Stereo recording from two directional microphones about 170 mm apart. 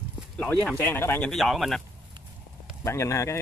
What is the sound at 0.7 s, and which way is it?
Speech, 15° left (ahead or behind).